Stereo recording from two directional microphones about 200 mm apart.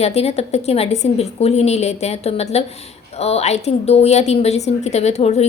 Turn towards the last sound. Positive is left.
turn(degrees=30)  # may be behind; listen again after turning